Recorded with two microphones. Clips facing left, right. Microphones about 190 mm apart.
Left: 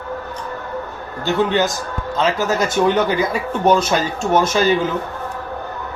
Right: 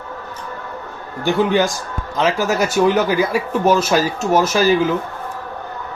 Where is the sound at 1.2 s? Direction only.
15° right (ahead or behind).